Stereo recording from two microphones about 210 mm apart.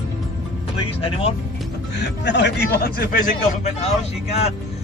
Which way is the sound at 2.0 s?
55° left (ahead or behind).